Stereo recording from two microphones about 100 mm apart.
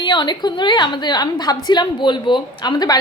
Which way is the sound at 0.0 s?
50° left (ahead or behind).